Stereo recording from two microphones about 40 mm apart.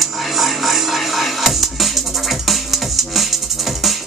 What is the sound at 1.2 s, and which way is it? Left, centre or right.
Music, centre.